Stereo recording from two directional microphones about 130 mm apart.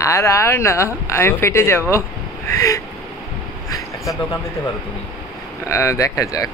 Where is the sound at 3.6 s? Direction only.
25° left (ahead or behind).